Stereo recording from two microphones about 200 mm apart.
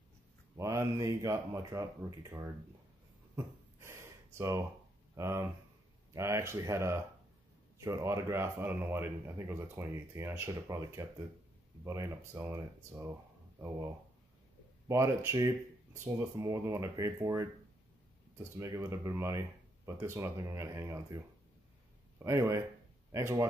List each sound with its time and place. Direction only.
0.6 s speech: 15° right (ahead or behind)
3.3 s a sound: 15° right (ahead or behind)
5.1 s speech: 15° right (ahead or behind)
14.9 s speech: 15° right (ahead or behind)
18.6 s speech: 15° right (ahead or behind)
22.2 s speech: 15° right (ahead or behind)